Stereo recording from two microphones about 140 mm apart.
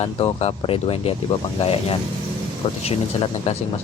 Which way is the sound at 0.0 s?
45° left (ahead or behind).